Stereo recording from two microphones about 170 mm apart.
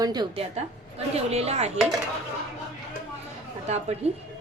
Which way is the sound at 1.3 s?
40° right (ahead or behind).